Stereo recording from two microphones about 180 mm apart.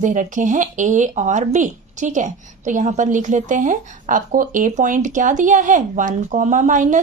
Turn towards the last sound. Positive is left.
turn(degrees=-45)  # may be behind; listen again after turning